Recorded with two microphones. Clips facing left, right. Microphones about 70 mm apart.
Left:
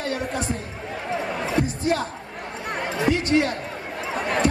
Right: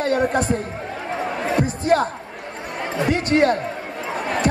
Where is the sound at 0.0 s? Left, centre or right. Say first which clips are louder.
Right 8 dB; right.